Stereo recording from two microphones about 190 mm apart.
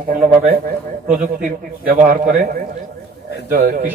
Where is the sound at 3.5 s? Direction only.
50° right (ahead or behind).